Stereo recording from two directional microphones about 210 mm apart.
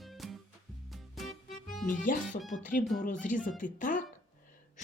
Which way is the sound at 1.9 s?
40° left (ahead or behind).